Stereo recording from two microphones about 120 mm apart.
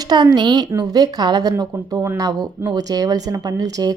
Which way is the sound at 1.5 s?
25° right (ahead or behind).